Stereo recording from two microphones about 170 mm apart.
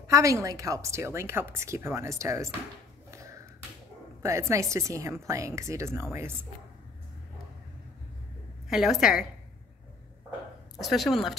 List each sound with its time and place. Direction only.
0.0 s a woman's voice: 20° right (ahead or behind)
3.1 s a sound: 20° right (ahead or behind)
4.2 s a woman's voice: 15° right (ahead or behind)
8.6 s a woman's voice: centre (ahead or behind)
10.8 s a woman's voice: centre (ahead or behind)